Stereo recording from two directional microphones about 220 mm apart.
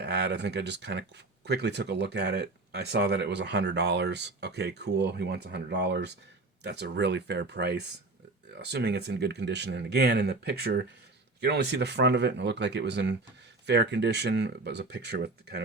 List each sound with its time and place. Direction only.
0.0 s speech: 50° right (ahead or behind)